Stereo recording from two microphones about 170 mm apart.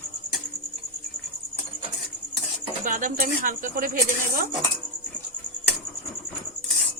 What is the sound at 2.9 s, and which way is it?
Speech, 50° right (ahead or behind).